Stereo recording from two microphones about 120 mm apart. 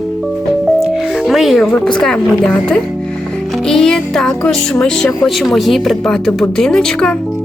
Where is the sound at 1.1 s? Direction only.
Centre (ahead or behind).